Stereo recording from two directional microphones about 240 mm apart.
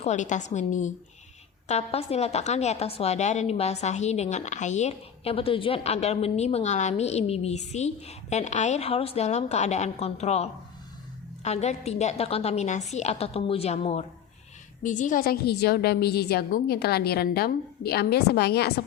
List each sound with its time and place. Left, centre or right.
0.0 s a woman's voice: left